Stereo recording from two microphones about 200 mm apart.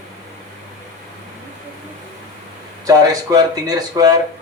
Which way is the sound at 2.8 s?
20° right (ahead or behind).